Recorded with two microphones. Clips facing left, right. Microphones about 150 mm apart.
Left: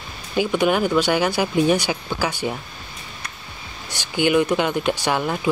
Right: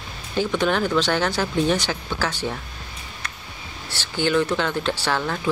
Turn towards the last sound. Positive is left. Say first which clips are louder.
# left 2 dB
turn(degrees=15)  # may be behind; listen again after turning